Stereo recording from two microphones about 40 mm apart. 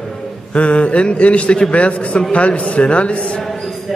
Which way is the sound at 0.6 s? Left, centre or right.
Left.